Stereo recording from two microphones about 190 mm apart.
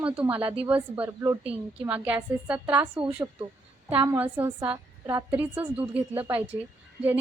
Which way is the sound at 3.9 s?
10° right (ahead or behind).